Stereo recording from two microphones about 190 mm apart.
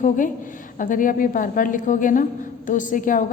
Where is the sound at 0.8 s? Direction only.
45° left (ahead or behind).